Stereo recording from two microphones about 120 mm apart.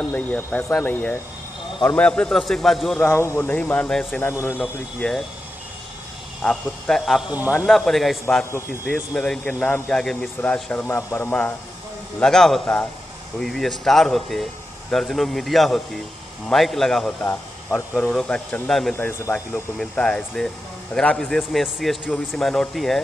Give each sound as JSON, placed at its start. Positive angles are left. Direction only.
{"t": 0.1, "sound": "speech", "side_deg": 15}
{"t": 3.1, "sound": "speech", "side_deg": 20}
{"t": 5.0, "sound": "speech", "side_deg": 10}
{"t": 6.4, "sound": "speech", "side_deg": 5}
{"t": 7.3, "sound": "speech", "side_deg": -15}
{"t": 7.6, "sound": "speech", "side_deg": 0}
{"t": 10.9, "sound": "speech", "side_deg": 25}
{"t": 12.2, "sound": "speech", "side_deg": 5}
{"t": 17.2, "sound": "speech", "side_deg": 15}
{"t": 18.9, "sound": "speech", "side_deg": 20}
{"t": 19.3, "sound": "speech", "side_deg": 5}